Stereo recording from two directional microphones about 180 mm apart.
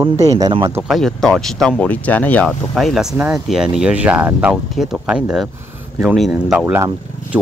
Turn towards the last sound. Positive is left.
turn(degrees=-15)  # may be behind; listen again after turning